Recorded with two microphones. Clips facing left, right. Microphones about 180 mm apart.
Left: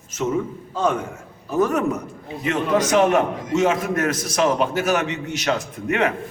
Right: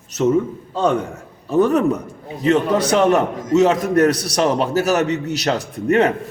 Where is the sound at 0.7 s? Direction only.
35° right (ahead or behind).